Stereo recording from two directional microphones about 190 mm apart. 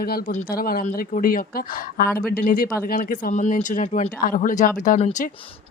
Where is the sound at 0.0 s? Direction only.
50° left (ahead or behind).